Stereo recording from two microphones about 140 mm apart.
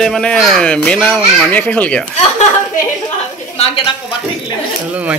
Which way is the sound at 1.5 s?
10° left (ahead or behind).